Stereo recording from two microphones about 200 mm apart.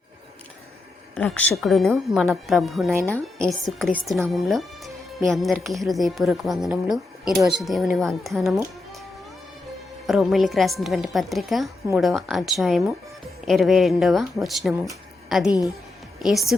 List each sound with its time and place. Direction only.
1.1 s speech: 5° left (ahead or behind)
10.1 s speech: centre (ahead or behind)
15.4 s a woman's voice: 20° left (ahead or behind)
16.2 s speech: centre (ahead or behind)